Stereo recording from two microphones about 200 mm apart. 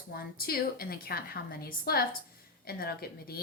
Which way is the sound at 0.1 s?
50° left (ahead or behind).